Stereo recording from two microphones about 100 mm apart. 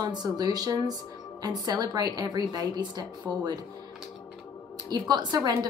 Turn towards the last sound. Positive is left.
turn(degrees=-45)  # may be behind; listen again after turning